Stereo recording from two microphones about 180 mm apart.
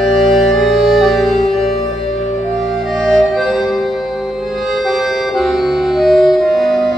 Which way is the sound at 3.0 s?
Centre (ahead or behind).